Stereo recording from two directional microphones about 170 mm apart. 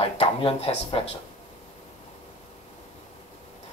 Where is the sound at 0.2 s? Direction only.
35° left (ahead or behind).